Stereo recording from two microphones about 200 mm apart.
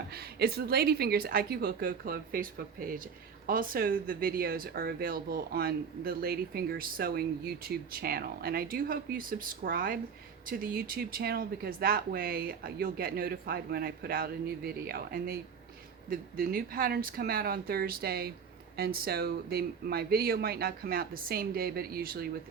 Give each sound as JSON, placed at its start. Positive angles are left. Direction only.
{"t": 0.1, "sound": "speech", "side_deg": -50}